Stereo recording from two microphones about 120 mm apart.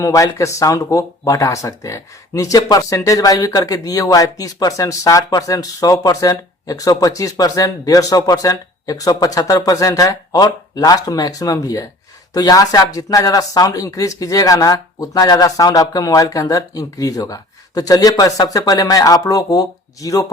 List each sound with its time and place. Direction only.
0.0 s speech: 25° left (ahead or behind)